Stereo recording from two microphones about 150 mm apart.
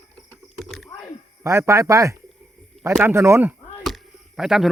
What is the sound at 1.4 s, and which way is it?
Speech, 20° right (ahead or behind).